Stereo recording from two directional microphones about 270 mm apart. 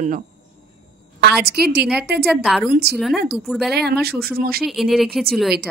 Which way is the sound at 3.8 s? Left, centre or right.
Right.